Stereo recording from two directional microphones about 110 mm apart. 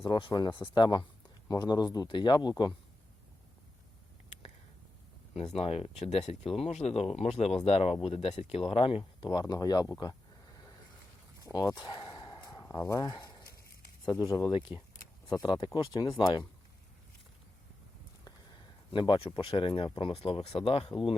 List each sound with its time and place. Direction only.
0.0 s speech: 50° left (ahead or behind)
5.5 s speech: 65° left (ahead or behind); by 9.9 s 35° left (ahead or behind)
10.0 s a sound: 40° left (ahead or behind)
11.4 s speech: 35° left (ahead or behind)
11.9 s a sound: 45° left (ahead or behind)
13.0 s speech: 40° left (ahead or behind)
14.0 s speech: 30° left (ahead or behind); by 16.5 s 45° left (ahead or behind)
18.9 s speech: 50° left (ahead or behind)